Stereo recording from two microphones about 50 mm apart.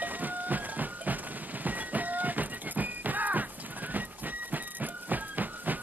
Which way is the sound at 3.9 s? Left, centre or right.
Right.